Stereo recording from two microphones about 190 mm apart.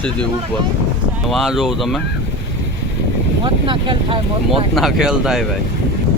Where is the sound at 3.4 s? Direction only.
25° right (ahead or behind).